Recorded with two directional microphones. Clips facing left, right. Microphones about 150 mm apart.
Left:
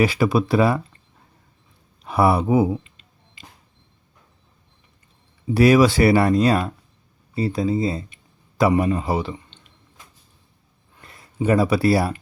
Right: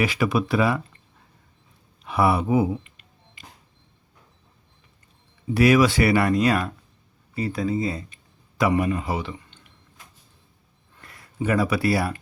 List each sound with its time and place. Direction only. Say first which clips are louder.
0.0 s speech: left 4 dB; 35° left (ahead or behind)
2.0 s a sound: left 3 dB; 35° left (ahead or behind)
5.5 s speech: left 3 dB; 35° left (ahead or behind)
11.0 s speech: left 4 dB; 25° left (ahead or behind)